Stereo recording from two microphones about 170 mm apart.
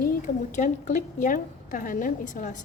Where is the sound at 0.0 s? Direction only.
55° left (ahead or behind).